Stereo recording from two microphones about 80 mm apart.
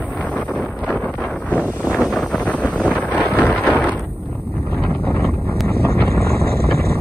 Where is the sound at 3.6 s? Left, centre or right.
Centre.